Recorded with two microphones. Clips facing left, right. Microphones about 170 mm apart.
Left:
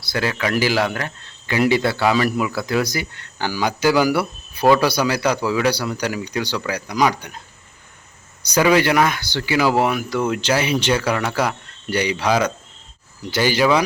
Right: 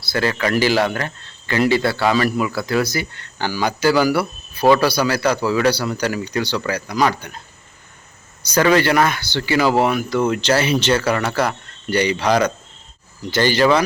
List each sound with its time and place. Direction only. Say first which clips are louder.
0.0 s speech: right 2 dB; 10° left (ahead or behind)
8.4 s speech: right 1 dB; 10° left (ahead or behind)